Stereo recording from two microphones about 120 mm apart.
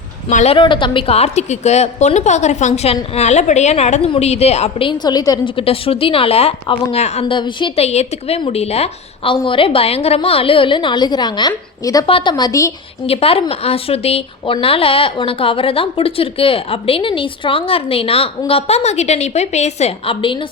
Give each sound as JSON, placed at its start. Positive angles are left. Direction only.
{"t": 0.3, "sound": "a woman's voice", "side_deg": 90}
{"t": 0.5, "sound": "a woman's voice", "side_deg": 45}
{"t": 4.9, "sound": "a woman's voice", "side_deg": 35}
{"t": 5.5, "sound": "a woman's voice", "side_deg": 50}
{"t": 7.3, "sound": "a woman's voice", "side_deg": 40}
{"t": 7.8, "sound": "a woman's voice", "side_deg": 65}
{"t": 9.3, "sound": "a woman's voice", "side_deg": 45}
{"t": 12.0, "sound": "a woman's voice", "side_deg": 45}
{"t": 13.1, "sound": "a woman's voice", "side_deg": 55}
{"t": 20.2, "sound": "a woman's voice", "side_deg": 45}